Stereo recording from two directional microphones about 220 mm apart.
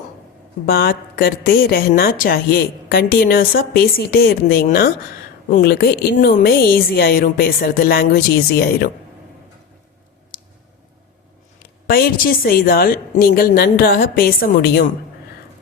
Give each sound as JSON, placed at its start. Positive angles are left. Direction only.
{"t": 0.6, "sound": "a woman's voice", "side_deg": 45}
{"t": 11.9, "sound": "a woman's voice", "side_deg": 40}